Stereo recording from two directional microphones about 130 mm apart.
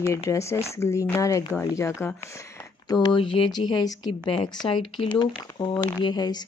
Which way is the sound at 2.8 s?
35° left (ahead or behind).